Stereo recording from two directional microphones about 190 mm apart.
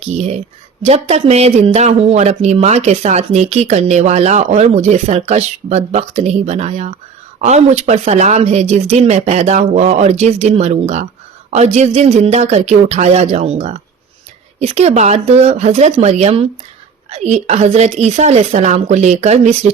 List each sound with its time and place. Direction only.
0.9 s speech: 35° right (ahead or behind)